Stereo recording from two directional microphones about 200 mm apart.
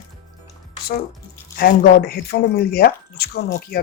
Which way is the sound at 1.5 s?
45° left (ahead or behind).